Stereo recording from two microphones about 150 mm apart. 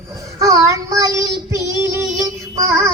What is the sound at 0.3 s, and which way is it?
Child singing, 20° right (ahead or behind).